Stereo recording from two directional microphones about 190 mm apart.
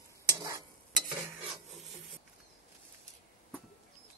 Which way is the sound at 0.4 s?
15° right (ahead or behind).